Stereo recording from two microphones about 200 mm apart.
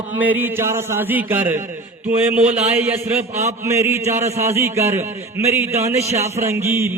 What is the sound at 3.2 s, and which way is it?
Speech, 35° right (ahead or behind).